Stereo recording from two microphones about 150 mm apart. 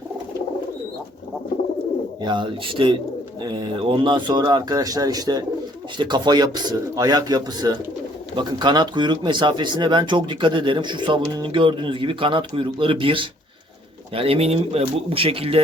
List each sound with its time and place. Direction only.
2.2 s speech: 30° right (ahead or behind)